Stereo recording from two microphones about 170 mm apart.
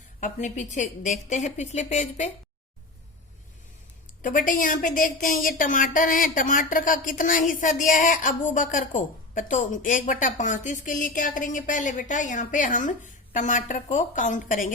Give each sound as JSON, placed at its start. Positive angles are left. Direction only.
{"t": 0.2, "sound": "a woman's voice", "side_deg": 45}
{"t": 4.2, "sound": "a woman's voice", "side_deg": 50}